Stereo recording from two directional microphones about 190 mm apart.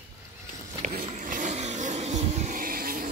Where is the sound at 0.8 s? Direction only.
40° right (ahead or behind).